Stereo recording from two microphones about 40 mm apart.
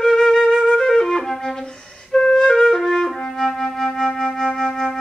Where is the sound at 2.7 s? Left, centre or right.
Centre.